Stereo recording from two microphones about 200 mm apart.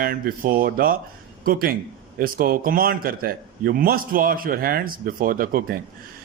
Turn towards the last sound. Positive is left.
turn(degrees=-45)  # may be behind; listen again after turning